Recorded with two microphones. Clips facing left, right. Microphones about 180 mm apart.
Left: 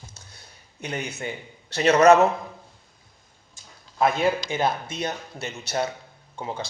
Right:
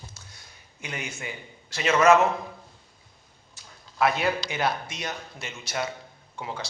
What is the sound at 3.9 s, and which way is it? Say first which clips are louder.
Speech: left 3 dB; 30° left (ahead or behind).